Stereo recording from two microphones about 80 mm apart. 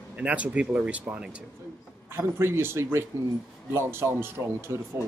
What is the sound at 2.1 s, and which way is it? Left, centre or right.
Speech, right.